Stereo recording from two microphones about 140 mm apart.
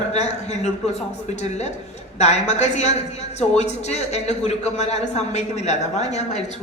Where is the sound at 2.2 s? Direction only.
55° left (ahead or behind).